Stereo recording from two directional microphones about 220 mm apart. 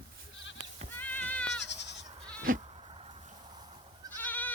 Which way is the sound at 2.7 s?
25° right (ahead or behind).